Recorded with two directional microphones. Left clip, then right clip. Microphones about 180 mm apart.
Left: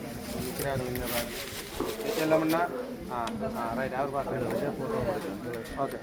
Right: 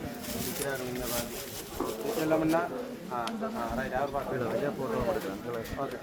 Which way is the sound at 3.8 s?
50° left (ahead or behind).